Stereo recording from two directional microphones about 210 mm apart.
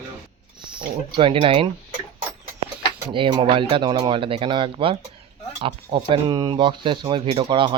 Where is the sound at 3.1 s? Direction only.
25° right (ahead or behind).